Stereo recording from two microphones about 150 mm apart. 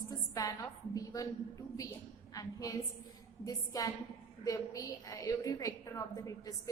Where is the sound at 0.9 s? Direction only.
25° left (ahead or behind).